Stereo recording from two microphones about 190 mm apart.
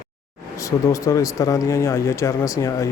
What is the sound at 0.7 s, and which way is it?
Speech, 15° left (ahead or behind).